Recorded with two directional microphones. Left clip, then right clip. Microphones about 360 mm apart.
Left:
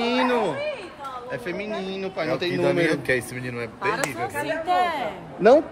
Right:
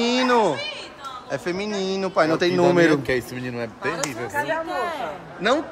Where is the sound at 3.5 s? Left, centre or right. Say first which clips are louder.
Left 2 dB; right.